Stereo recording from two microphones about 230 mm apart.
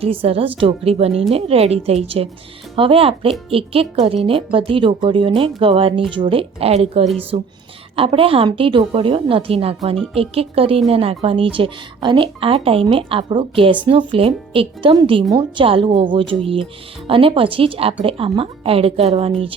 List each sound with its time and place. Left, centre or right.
0.0 s speech: right